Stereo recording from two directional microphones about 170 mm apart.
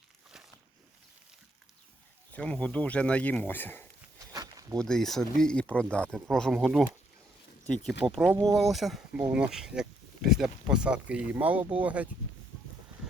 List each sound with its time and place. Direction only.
2.3 s speech: 5° left (ahead or behind)
4.3 s a sound: 20° right (ahead or behind)
4.8 s speech: 5° left (ahead or behind)
8.0 s speech: centre (ahead or behind)